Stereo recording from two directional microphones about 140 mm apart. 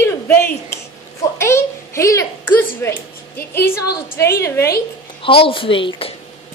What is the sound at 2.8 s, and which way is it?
Speech, 20° left (ahead or behind).